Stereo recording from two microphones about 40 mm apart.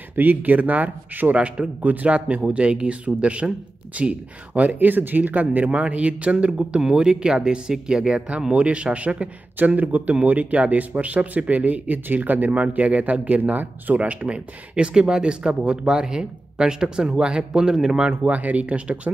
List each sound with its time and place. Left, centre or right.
0.1 s speech: right
1.3 s speech: right
1.8 s speech: right
4.7 s speech: right
6.9 s speech: centre
18.3 s speech: right